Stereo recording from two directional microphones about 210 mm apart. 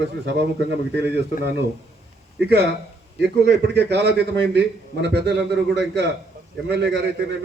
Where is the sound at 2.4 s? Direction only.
55° right (ahead or behind).